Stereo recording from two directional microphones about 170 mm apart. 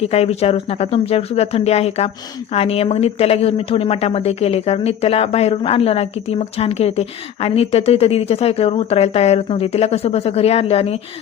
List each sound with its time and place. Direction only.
0.0 s a woman's voice: 35° left (ahead or behind)